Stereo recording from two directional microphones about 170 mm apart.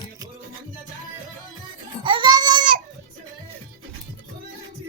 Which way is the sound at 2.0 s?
25° right (ahead or behind).